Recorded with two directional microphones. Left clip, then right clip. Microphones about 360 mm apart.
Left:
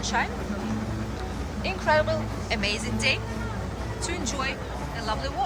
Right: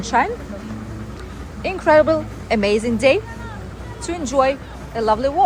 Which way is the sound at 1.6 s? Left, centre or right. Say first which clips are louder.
Right 10 dB; centre.